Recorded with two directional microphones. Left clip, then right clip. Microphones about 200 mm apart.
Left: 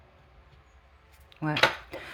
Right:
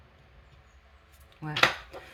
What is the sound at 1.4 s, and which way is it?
Dishes, 45° left (ahead or behind).